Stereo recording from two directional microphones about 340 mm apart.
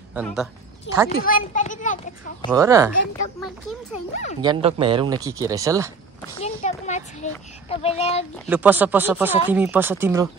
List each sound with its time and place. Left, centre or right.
0.1 s speech: centre
1.0 s a child's voice: left
2.5 s speech: centre
4.4 s speech: centre
6.3 s a child's voice: centre
8.5 s speech: centre